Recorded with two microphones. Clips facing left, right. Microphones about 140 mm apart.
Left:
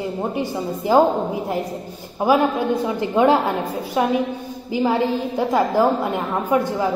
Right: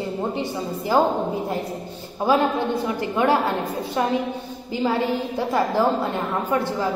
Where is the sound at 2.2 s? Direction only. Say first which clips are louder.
Left 2 dB; 15° left (ahead or behind).